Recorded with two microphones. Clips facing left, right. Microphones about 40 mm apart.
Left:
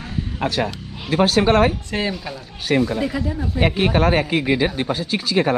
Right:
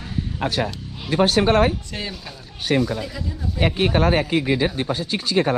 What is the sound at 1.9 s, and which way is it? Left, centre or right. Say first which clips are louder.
Speech: left 7 dB; left.